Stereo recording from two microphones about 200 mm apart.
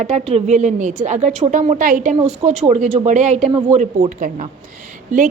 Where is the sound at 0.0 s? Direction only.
30° right (ahead or behind).